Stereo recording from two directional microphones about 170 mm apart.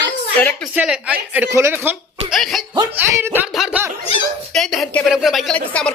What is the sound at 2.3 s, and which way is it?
Speech, centre (ahead or behind).